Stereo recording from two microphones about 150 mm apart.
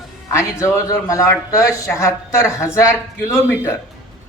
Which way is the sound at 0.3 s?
20° left (ahead or behind).